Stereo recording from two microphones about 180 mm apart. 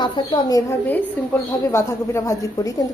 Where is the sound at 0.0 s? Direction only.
20° left (ahead or behind).